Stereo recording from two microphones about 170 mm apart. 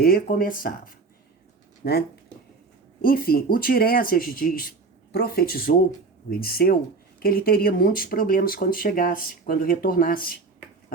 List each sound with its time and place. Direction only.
0.0 s speech: 60° left (ahead or behind)
1.8 s speech: 70° left (ahead or behind)
3.0 s speech: 60° left (ahead or behind)